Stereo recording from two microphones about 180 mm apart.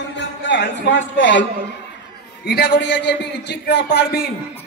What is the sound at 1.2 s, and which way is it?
Speech, 90° left.